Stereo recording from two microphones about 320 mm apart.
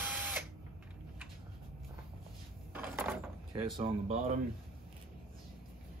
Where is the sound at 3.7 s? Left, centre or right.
Centre.